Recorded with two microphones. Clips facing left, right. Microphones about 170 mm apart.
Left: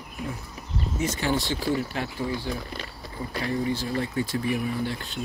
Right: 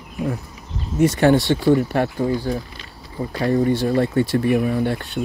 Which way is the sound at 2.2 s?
40° right (ahead or behind).